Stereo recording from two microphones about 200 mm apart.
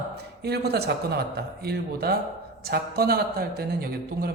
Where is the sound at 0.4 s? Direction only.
55° right (ahead or behind).